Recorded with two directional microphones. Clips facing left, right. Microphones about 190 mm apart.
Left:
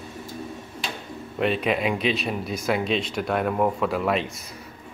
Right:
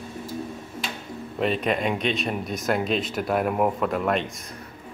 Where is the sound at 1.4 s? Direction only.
Centre (ahead or behind).